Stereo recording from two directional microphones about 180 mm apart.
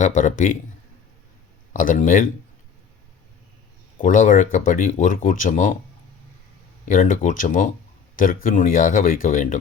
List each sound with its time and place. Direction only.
0.0 s speech: 45° left (ahead or behind)
1.7 s speech: 45° left (ahead or behind)
4.0 s speech: 45° left (ahead or behind)
6.8 s speech: 50° left (ahead or behind)